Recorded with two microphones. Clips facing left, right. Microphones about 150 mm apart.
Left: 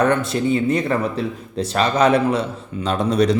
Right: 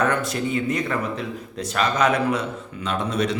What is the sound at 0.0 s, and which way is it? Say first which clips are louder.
A man's voice: left 5 dB; 25° left (ahead or behind).